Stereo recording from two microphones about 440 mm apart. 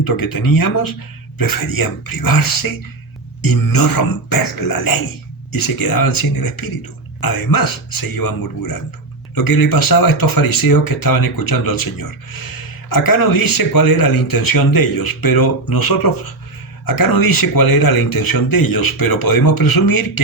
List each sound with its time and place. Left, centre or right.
0.0 s speech: left